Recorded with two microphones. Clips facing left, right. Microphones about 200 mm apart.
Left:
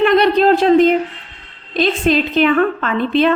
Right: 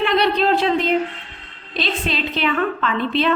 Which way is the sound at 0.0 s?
45° left (ahead or behind).